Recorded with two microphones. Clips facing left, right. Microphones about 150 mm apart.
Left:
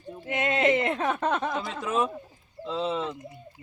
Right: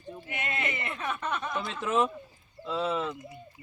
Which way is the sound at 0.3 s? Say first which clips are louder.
Left 11 dB; 90° left.